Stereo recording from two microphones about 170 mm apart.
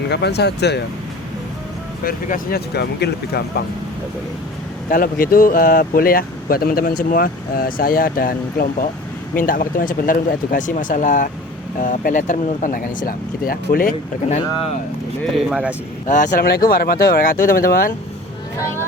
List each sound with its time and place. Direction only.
0.1 s speech: 80° left
2.0 s speech: 60° left (ahead or behind)
4.9 s speech: 55° left (ahead or behind)
15.3 s speech: centre (ahead or behind)
16.0 s speech: 50° left (ahead or behind)
16.5 s speech: 60° left (ahead or behind)